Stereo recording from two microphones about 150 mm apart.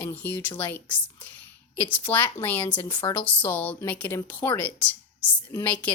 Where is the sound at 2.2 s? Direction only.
15° left (ahead or behind).